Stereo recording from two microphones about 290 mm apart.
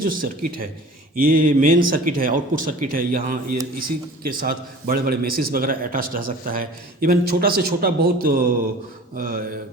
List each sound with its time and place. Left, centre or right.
0.0 s a man's voice: right